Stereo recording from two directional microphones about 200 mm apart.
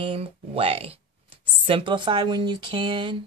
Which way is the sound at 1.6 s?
25° right (ahead or behind).